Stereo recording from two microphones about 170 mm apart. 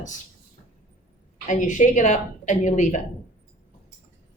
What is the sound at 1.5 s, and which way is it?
A woman's voice, 45° left (ahead or behind).